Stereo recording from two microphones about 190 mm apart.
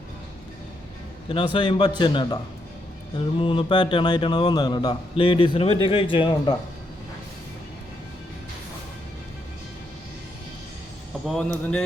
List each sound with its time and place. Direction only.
1.5 s speech: 25° left (ahead or behind)
11.3 s speech: 5° left (ahead or behind)